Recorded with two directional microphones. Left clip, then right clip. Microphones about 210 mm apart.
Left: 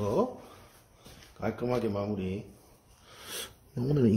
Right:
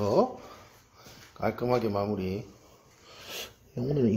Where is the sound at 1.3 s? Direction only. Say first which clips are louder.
Right 4 dB; 10° right (ahead or behind).